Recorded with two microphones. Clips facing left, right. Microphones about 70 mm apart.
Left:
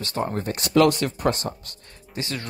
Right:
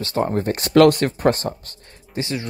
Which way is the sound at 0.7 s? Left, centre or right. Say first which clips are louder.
Right 5 dB; right.